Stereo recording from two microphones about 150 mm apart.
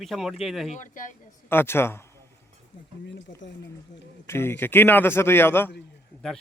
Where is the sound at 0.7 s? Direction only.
60° left (ahead or behind).